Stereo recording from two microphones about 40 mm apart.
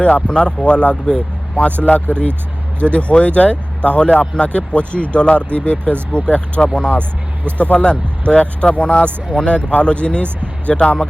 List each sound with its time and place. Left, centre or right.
0.1 s speech: left
2.8 s speech: left